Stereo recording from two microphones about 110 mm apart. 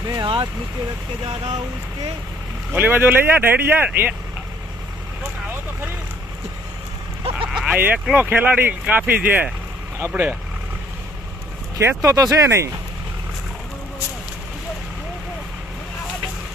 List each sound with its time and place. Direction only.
0.0 s vehicle: 40° right (ahead or behind)
1.2 s speech: 45° right (ahead or behind)
2.7 s speech: 15° right (ahead or behind)
7.5 s speech: 15° right (ahead or behind)
12.0 s speech: 30° right (ahead or behind)